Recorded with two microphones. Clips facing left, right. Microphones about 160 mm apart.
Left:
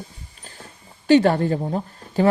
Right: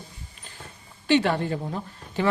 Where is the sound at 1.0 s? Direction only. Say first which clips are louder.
Left 6 dB; 40° left (ahead or behind).